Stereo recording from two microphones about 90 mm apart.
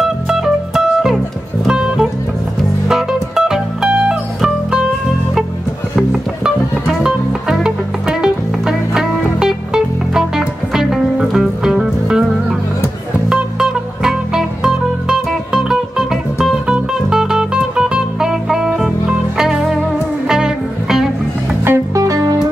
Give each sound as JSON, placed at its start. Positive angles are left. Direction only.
{"t": 0.0, "sound": "music", "side_deg": -5}
{"t": 5.9, "sound": "music", "side_deg": -5}
{"t": 13.3, "sound": "music", "side_deg": -5}
{"t": 21.6, "sound": "music", "side_deg": -30}